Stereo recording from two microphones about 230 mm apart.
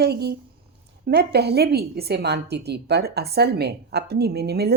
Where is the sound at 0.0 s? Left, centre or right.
Right.